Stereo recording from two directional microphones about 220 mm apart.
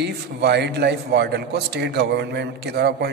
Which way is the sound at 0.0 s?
50° right (ahead or behind).